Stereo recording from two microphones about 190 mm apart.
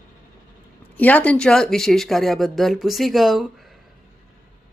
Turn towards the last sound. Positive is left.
turn(degrees=0)  # may be behind; listen again after turning